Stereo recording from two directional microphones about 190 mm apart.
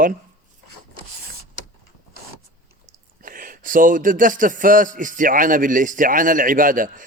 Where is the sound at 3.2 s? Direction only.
45° right (ahead or behind).